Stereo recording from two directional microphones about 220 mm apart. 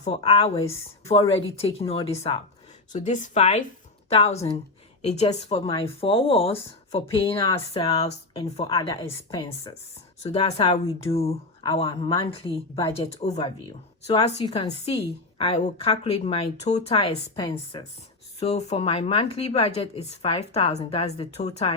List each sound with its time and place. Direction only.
0.0 s a woman's voice: 25° left (ahead or behind)
10.2 s a woman's voice: 30° left (ahead or behind)